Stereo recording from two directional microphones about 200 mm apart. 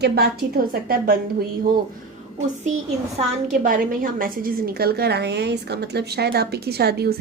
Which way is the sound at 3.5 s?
45° right (ahead or behind).